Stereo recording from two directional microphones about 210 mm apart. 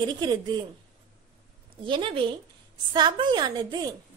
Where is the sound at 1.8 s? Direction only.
25° right (ahead or behind).